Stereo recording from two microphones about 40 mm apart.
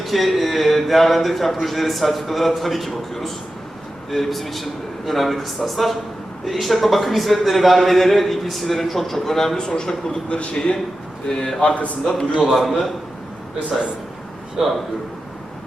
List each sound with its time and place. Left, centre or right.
0.0 s a sound: centre
0.3 s a man's voice: centre
9.6 s a man's voice: left
12.0 s a man's voice: centre
12.5 s a man's voice: centre
14.6 s a man's voice: centre